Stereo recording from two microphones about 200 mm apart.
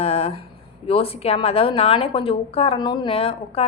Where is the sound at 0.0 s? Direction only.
30° left (ahead or behind).